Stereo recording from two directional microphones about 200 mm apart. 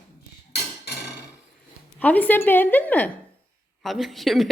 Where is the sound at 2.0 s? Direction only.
10° left (ahead or behind).